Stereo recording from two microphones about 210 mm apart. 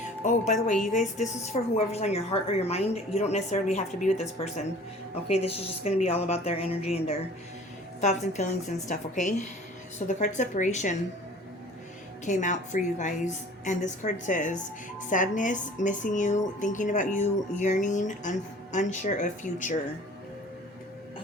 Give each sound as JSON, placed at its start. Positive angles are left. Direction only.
{"t": 0.3, "sound": "a woman's voice", "side_deg": 35}
{"t": 12.2, "sound": "a woman's voice", "side_deg": 35}